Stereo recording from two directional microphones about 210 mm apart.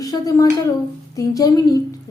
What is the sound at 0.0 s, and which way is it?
A woman's voice, 15° left (ahead or behind).